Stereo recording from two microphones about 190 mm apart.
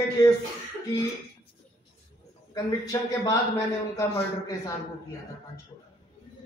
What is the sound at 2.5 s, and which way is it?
Speech, 20° left (ahead or behind).